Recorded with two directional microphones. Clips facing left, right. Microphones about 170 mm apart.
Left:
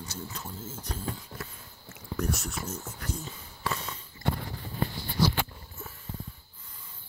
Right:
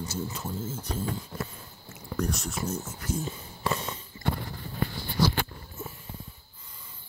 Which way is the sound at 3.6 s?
20° right (ahead or behind).